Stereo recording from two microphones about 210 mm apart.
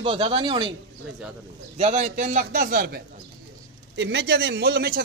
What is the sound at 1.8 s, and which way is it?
A man's voice, 30° right (ahead or behind).